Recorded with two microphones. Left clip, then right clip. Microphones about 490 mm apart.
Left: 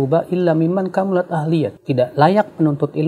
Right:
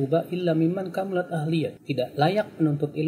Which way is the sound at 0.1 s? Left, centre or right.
Left.